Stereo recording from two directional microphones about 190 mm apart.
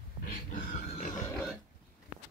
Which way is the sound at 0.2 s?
45° left (ahead or behind).